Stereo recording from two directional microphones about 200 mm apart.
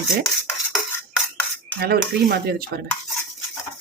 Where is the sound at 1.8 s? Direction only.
55° right (ahead or behind).